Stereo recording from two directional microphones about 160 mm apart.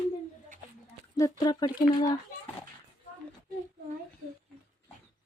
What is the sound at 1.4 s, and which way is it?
Speech, 25° left (ahead or behind).